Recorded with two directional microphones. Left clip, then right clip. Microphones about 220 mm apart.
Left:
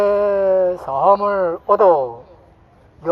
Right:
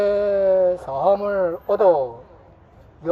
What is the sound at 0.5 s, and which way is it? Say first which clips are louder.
Speech: left 2 dB; 30° left (ahead or behind).